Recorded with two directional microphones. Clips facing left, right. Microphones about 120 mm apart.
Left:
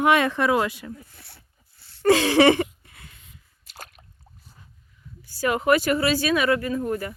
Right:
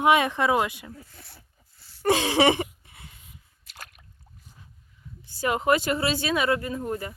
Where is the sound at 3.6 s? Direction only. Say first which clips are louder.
Left 3 dB; 35° left (ahead or behind).